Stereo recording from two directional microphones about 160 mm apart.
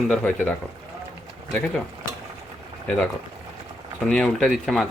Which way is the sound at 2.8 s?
5° left (ahead or behind).